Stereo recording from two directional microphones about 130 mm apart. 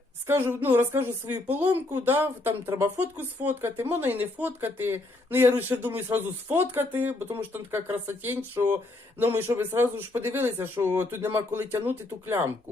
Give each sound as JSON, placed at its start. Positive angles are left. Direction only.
{"t": 0.3, "sound": "speech", "side_deg": -15}